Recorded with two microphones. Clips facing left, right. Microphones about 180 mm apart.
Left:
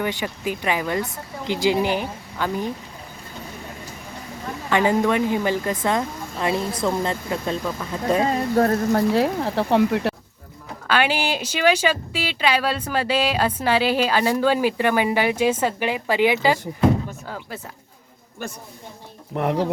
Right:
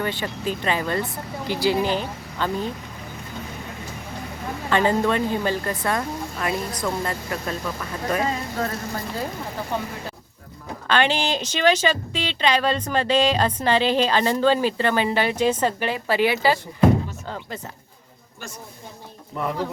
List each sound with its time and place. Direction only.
0.0 s speech: 15° left (ahead or behind)
4.7 s speech: 15° left (ahead or behind)
8.3 s speech: 45° left (ahead or behind)
8.9 s speech: 70° left (ahead or behind)
10.8 s speech: 10° left (ahead or behind)
19.3 s speech: 70° left (ahead or behind)